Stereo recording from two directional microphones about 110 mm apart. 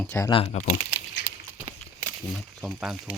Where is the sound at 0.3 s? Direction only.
55° left (ahead or behind).